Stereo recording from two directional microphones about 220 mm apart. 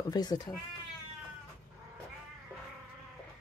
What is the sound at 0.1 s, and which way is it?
Speech, 20° left (ahead or behind).